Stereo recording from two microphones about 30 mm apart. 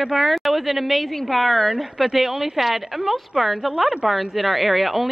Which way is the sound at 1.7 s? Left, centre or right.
Centre.